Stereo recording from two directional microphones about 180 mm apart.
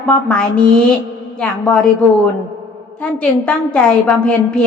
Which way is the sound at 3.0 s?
5° left (ahead or behind).